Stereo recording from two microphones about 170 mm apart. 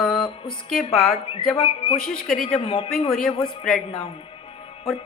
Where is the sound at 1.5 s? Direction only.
35° left (ahead or behind).